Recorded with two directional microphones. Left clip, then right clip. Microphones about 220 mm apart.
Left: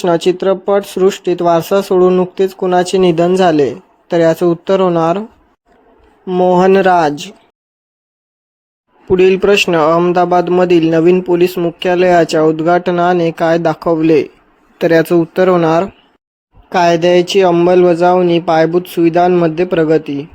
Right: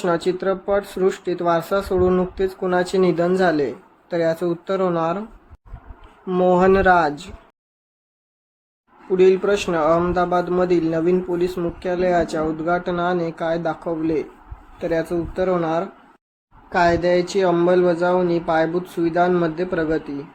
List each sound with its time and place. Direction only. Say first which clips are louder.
0.0 s speech: left 8 dB; 35° left (ahead or behind)
6.2 s speech: left 6 dB; 25° left (ahead or behind)
9.0 s speech: left 7 dB; 40° left (ahead or behind)